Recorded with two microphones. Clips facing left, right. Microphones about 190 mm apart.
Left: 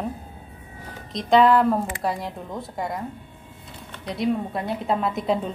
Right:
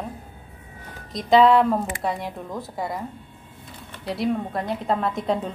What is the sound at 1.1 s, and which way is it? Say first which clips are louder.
A woman's voice: right 1 dB; centre (ahead or behind).